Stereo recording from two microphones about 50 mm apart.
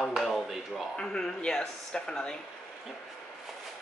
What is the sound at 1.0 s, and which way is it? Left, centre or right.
Speech, centre.